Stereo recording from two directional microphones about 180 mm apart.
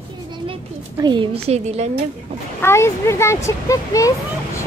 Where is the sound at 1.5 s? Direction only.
35° right (ahead or behind).